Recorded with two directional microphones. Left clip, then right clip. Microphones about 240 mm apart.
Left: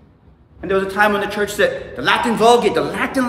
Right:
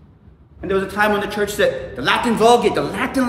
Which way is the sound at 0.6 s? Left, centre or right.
Centre.